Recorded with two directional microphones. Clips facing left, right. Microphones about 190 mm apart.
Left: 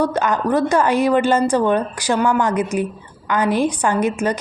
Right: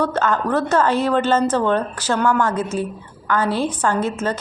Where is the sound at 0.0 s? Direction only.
10° left (ahead or behind).